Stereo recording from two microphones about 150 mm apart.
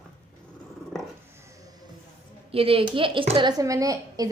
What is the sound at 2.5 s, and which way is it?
Speech, 40° right (ahead or behind).